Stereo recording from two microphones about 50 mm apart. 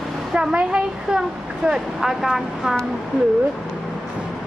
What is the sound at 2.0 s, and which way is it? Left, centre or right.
Speech, centre.